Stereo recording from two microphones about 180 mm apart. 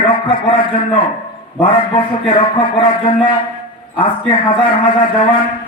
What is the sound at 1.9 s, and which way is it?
A man's voice, 30° left (ahead or behind).